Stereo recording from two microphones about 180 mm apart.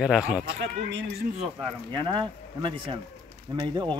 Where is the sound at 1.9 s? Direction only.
25° right (ahead or behind).